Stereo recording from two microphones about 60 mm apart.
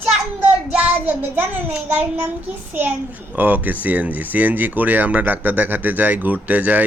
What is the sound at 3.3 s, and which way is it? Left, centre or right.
Speech, right.